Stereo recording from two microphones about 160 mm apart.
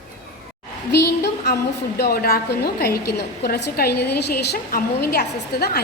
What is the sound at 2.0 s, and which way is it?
A woman's voice, 70° left (ahead or behind).